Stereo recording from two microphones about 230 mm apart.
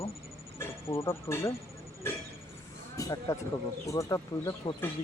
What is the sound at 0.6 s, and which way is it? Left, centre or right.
Speech, centre.